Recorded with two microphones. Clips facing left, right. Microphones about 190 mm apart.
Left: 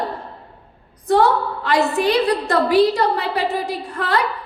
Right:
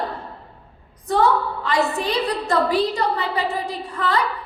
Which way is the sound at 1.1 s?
70° left (ahead or behind).